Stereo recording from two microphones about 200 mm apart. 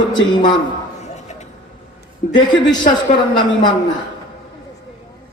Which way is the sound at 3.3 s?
20° left (ahead or behind).